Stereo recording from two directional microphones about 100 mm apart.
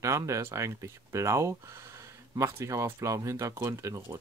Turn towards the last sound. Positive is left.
turn(degrees=-35)  # may be behind; listen again after turning